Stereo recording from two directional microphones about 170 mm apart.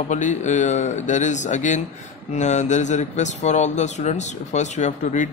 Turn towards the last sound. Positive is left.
turn(degrees=45)  # may be behind; listen again after turning